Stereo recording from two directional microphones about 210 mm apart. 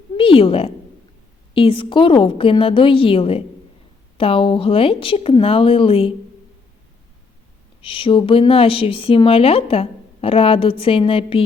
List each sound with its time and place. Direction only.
0.2 s speech: 25° left (ahead or behind)
7.8 s speech: 25° left (ahead or behind)